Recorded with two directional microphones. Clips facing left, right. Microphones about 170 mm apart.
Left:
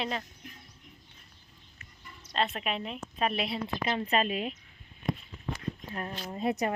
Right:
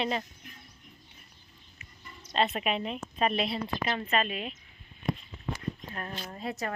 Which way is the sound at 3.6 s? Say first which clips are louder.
Left 1 dB; 20° left (ahead or behind).